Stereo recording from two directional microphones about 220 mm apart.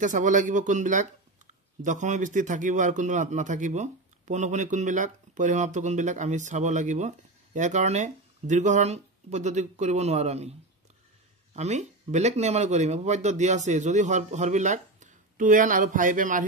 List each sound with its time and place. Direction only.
0.0 s a man's voice: 35° right (ahead or behind)
11.5 s a man's voice: 30° right (ahead or behind)